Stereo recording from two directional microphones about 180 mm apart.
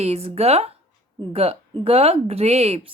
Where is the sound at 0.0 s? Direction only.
35° right (ahead or behind).